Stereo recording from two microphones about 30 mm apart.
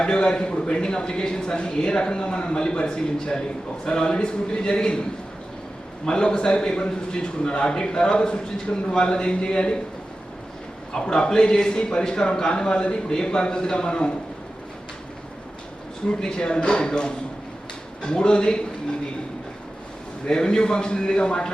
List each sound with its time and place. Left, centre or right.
0.0 s a man's voice: left
6.1 s a man's voice: left
11.0 s a man's voice: left
16.0 s a man's voice: left
20.2 s a man's voice: left